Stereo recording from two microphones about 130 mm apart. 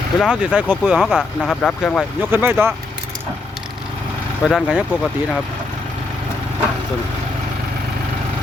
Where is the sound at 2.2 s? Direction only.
15° right (ahead or behind).